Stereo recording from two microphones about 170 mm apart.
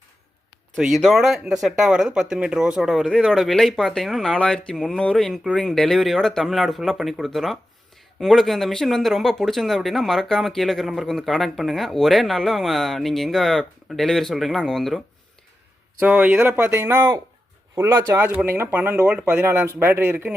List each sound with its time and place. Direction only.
0.8 s speech: centre (ahead or behind)